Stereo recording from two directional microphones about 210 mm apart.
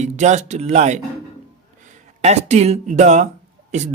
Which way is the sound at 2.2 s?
30° right (ahead or behind).